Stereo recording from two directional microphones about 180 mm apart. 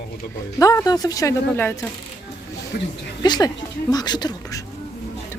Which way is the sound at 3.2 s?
25° left (ahead or behind).